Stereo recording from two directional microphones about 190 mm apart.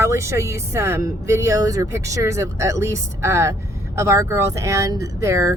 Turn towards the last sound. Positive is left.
turn(degrees=-15)  # may be behind; listen again after turning